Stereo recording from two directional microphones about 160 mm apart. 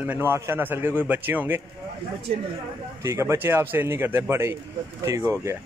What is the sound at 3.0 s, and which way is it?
A man's voice, 20° right (ahead or behind).